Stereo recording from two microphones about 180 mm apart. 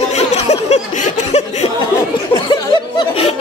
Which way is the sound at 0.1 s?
35° left (ahead or behind).